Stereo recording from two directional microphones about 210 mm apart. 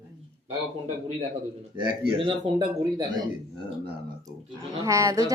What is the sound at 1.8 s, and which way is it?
Speech, 20° right (ahead or behind).